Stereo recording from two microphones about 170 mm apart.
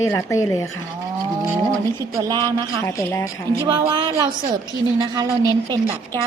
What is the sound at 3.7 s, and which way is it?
Speech, 25° right (ahead or behind).